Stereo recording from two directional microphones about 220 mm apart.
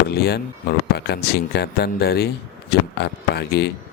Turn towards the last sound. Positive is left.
turn(degrees=50)  # may be behind; listen again after turning